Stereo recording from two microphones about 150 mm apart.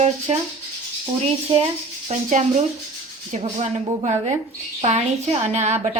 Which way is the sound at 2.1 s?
50° right (ahead or behind).